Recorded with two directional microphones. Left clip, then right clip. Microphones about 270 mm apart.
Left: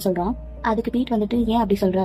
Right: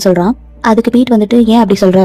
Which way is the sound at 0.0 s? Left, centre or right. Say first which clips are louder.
Right 13 dB; right.